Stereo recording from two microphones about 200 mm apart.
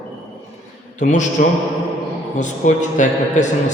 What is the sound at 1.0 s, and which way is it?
A man's voice, 40° left (ahead or behind).